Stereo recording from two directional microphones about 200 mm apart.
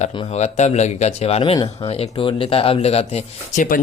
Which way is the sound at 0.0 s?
30° left (ahead or behind).